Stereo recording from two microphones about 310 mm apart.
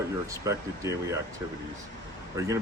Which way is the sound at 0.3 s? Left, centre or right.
Centre.